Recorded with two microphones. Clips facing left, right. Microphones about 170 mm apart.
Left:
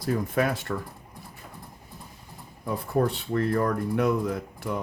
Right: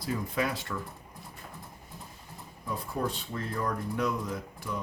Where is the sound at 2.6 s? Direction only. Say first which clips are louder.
Left 7 dB; 60° left (ahead or behind).